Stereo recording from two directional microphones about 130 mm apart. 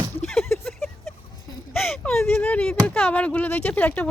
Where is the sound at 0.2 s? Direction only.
5° left (ahead or behind).